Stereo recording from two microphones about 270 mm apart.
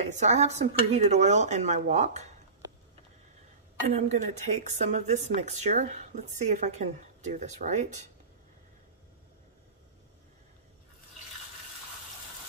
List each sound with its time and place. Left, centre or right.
0.0 s speech: right
3.9 s speech: right